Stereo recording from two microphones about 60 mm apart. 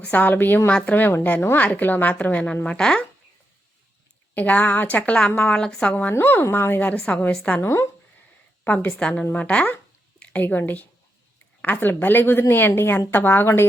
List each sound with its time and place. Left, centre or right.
0.0 s a woman's voice: left
4.4 s a woman's voice: left
5.9 s a woman's voice: left
6.9 s a woman's voice: centre
7.6 s speech: left
8.6 s a woman's voice: left
9.0 s a woman's voice: centre
10.2 s a sound: left
10.4 s a woman's voice: left